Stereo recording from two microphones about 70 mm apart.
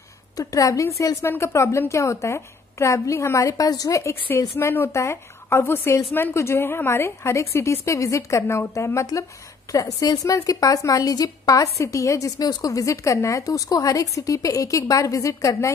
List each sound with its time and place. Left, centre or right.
0.4 s a woman's voice: left
4.0 s a woman's voice: left
9.7 s a woman's voice: left